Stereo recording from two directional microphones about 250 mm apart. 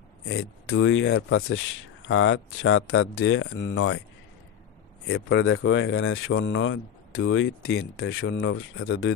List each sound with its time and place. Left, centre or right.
0.3 s speech: left
5.0 s speech: left